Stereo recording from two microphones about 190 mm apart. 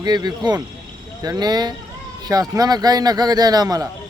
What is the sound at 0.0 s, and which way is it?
Speech, 20° right (ahead or behind).